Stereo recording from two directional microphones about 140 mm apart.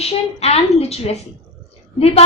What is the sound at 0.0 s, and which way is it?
A woman's voice, 45° left (ahead or behind).